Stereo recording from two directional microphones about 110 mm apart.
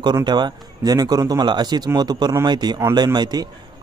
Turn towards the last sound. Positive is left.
turn(degrees=-35)  # may be behind; listen again after turning